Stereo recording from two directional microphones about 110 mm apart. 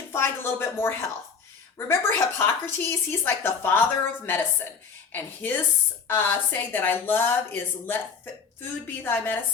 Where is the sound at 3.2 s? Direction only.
20° left (ahead or behind).